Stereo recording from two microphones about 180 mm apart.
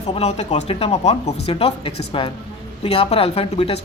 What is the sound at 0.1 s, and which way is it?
A man's voice, 35° left (ahead or behind).